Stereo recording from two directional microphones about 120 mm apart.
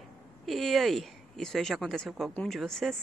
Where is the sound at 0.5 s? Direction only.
Centre (ahead or behind).